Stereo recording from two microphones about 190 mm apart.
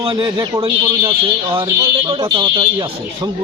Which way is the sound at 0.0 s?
25° right (ahead or behind).